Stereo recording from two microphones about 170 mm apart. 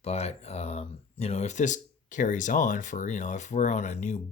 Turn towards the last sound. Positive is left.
turn(degrees=40)  # may be behind; listen again after turning